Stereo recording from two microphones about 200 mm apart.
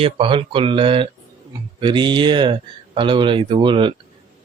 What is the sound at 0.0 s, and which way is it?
Speech, 25° right (ahead or behind).